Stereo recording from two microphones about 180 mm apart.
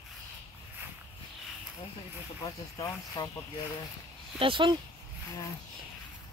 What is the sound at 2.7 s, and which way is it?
Speech, 20° left (ahead or behind).